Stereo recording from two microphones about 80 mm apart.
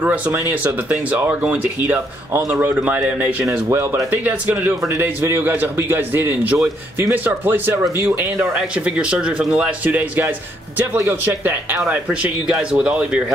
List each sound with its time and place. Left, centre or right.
0.0 s a man's voice: centre
8.4 s a man's voice: centre